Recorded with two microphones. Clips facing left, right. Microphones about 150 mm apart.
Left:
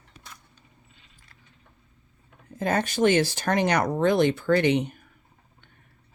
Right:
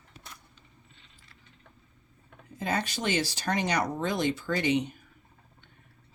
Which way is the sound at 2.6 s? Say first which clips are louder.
Left 8 dB; 50° left (ahead or behind).